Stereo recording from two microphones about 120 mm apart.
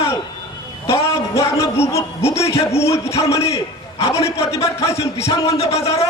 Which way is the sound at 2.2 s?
60° left (ahead or behind).